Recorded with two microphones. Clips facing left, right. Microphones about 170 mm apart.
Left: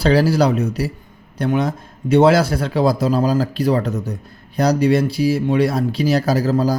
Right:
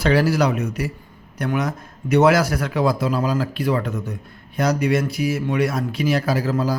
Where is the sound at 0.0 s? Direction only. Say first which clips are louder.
Left 3 dB; 35° left (ahead or behind).